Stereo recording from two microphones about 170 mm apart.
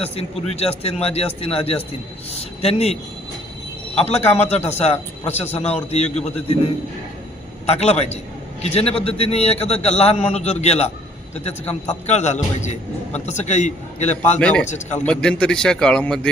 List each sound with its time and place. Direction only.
0.0 s a man's voice: 35° left (ahead or behind)
7.7 s a man's voice: 40° left (ahead or behind)
14.3 s speech: 5° left (ahead or behind)
14.7 s speech: 45° left (ahead or behind)
15.0 s a man's voice: 5° left (ahead or behind)